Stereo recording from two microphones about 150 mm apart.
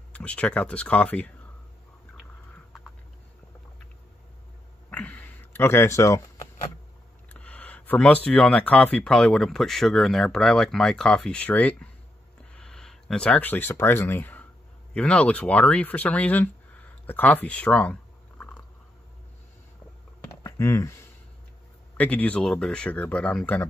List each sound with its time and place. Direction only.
0.1 s speech: 10° left (ahead or behind)
4.9 s a sound: 10° left (ahead or behind)
7.2 s speech: 10° left (ahead or behind)
20.4 s speech: 20° left (ahead or behind)
21.9 s speech: 10° left (ahead or behind)